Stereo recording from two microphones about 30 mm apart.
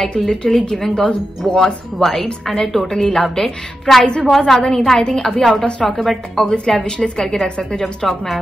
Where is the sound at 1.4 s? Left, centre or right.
Centre.